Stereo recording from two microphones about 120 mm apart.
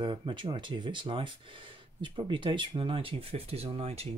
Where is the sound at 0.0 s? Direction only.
40° right (ahead or behind).